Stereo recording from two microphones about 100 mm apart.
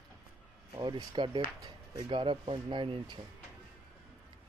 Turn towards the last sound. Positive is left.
turn(degrees=-60)  # may be behind; listen again after turning